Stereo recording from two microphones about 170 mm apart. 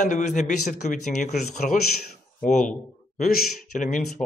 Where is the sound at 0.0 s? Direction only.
45° left (ahead or behind).